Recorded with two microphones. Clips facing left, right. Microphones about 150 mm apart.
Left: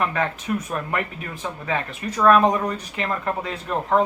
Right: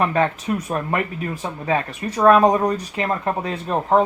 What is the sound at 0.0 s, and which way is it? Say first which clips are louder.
Speech: right 5 dB; 35° right (ahead or behind).